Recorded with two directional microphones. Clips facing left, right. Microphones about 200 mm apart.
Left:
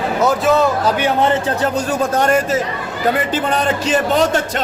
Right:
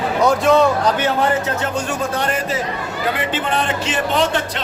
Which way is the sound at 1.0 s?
20° left (ahead or behind).